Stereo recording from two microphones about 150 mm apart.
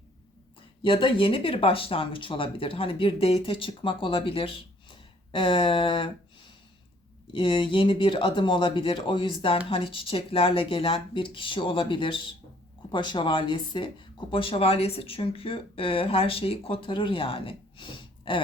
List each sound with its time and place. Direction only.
0.8 s speech: 35° left (ahead or behind)